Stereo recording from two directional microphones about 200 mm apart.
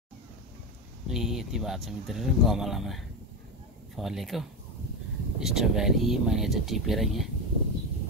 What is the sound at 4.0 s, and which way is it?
Speech, centre (ahead or behind).